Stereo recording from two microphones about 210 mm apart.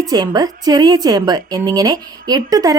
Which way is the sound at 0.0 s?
20° right (ahead or behind).